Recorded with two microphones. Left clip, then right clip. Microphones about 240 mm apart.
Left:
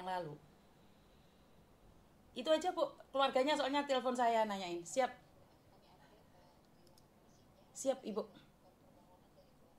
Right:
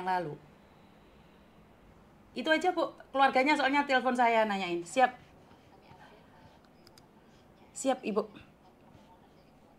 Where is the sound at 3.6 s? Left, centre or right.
Right.